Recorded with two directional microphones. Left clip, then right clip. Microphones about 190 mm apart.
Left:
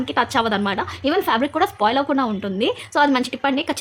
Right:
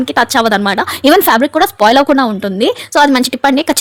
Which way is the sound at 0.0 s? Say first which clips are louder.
Right 8 dB; 40° right (ahead or behind).